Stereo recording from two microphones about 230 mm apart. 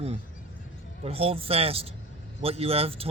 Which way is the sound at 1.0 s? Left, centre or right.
Right.